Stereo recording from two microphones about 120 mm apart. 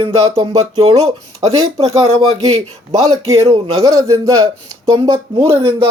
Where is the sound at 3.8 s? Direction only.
30° right (ahead or behind).